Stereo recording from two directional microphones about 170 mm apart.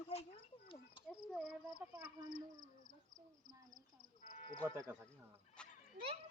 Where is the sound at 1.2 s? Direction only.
5° right (ahead or behind).